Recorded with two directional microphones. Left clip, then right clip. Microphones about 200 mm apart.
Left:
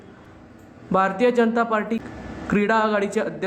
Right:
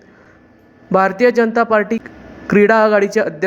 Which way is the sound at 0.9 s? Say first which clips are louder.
Right 6 dB; 25° right (ahead or behind).